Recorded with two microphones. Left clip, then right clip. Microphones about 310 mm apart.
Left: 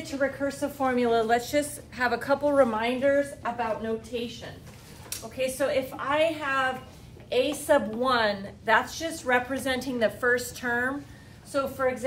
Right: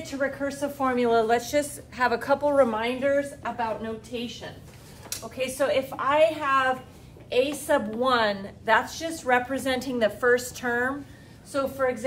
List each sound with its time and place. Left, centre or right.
0.0 s speech: centre
5.6 s a woman's voice: centre